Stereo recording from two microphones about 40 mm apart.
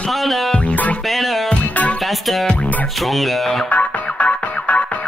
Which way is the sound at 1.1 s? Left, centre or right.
Centre.